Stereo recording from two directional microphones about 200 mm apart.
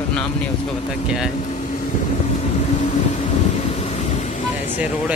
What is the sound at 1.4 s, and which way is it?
Vehicle, 40° left (ahead or behind).